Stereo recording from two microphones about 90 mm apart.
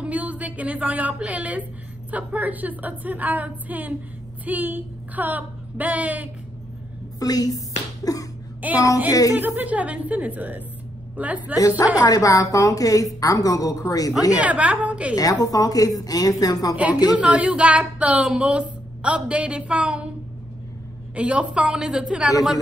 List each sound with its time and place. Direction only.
0.0 s a woman's voice: 15° right (ahead or behind)
7.2 s a sound: 45° left (ahead or behind)
8.5 s a woman's voice: 15° right (ahead or behind)
11.5 s a woman's voice: 40° left (ahead or behind)
14.4 s a woman's voice: 15° right (ahead or behind)
15.1 s a woman's voice: 45° left (ahead or behind)
16.7 s a woman's voice: 15° right (ahead or behind)
21.1 s a woman's voice: 15° right (ahead or behind)